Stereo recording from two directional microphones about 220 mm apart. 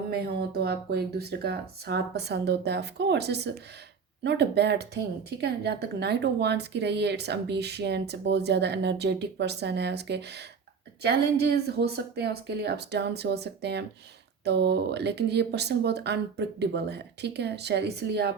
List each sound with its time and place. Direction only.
0.1 s speech: 45° right (ahead or behind)